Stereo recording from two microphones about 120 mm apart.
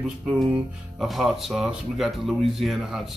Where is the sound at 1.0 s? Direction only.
Centre (ahead or behind).